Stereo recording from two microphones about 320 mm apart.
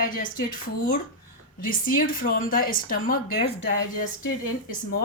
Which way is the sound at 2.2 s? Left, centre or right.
Left.